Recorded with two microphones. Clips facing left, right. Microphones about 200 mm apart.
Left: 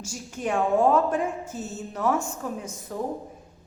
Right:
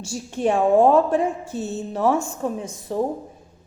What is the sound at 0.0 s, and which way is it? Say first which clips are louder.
A woman's voice: right 8 dB; 30° right (ahead or behind).